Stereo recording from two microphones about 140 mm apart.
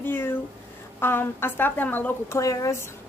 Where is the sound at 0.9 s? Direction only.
15° left (ahead or behind).